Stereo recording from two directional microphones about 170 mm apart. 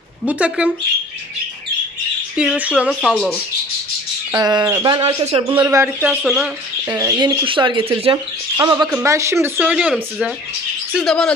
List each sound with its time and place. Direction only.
0.3 s speech: 10° right (ahead or behind)
2.3 s speech: 5° right (ahead or behind)
3.0 s speech: 5° left (ahead or behind)
4.3 s speech: 25° right (ahead or behind)
5.0 s speech: 35° right (ahead or behind)
5.6 s speech: 15° right (ahead or behind)
6.0 s speech: 5° right (ahead or behind)
6.9 s speech: 20° right (ahead or behind); by 11.3 s 5° left (ahead or behind)